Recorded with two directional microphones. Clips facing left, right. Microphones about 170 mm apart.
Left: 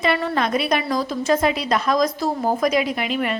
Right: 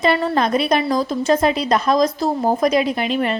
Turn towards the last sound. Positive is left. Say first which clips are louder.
# right 3 dB
turn(degrees=-35)  # may be behind; listen again after turning